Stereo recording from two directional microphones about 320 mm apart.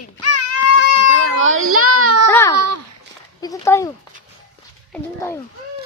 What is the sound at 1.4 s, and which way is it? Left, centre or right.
Child singing, right.